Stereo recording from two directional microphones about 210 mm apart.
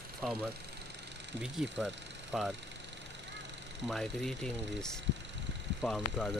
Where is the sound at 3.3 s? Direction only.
60° right (ahead or behind).